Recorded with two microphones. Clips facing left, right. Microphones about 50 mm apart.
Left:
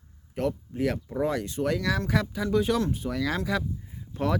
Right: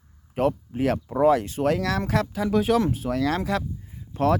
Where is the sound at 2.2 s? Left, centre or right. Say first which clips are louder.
Right 3 dB; centre.